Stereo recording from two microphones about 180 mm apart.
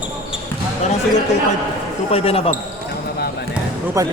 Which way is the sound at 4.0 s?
20° right (ahead or behind).